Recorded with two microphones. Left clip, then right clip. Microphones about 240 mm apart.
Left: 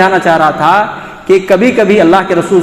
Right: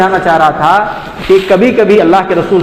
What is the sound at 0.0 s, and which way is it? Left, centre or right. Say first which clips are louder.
A man's voice: even; left.